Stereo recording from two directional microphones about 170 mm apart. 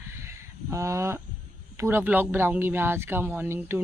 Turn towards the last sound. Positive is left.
turn(degrees=-15)  # may be behind; listen again after turning